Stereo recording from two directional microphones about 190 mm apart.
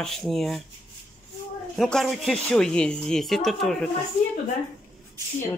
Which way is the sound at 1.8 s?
Centre (ahead or behind).